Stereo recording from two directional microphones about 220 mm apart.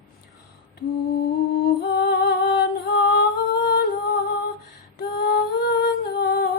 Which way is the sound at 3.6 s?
45° left (ahead or behind).